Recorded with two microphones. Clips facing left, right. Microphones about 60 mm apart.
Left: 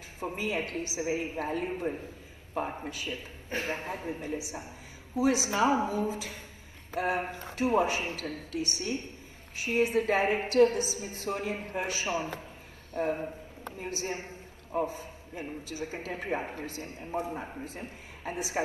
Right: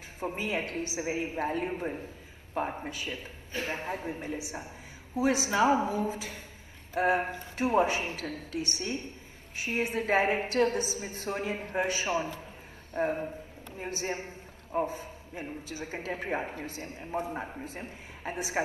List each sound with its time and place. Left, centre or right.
0.4 s a man's voice: right
2.9 s a man's voice: right
3.4 s a man's voice: left
3.7 s a man's voice: right